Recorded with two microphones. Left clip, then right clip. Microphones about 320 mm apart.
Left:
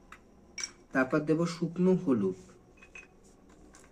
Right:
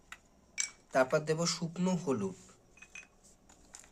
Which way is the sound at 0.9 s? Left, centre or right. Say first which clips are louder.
Left 1 dB; right.